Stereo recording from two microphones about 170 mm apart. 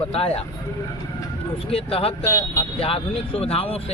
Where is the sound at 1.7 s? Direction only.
35° left (ahead or behind).